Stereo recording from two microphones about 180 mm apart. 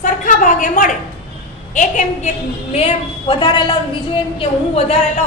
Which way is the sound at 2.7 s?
30° left (ahead or behind).